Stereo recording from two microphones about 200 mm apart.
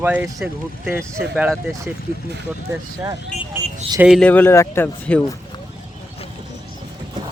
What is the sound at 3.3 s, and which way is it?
Vehicle, 35° left (ahead or behind).